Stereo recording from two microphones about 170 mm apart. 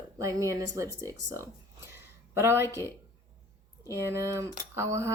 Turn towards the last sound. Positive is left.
turn(degrees=-15)  # may be behind; listen again after turning